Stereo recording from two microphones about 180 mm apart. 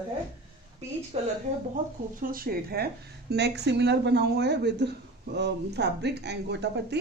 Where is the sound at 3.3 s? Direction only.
70° right (ahead or behind).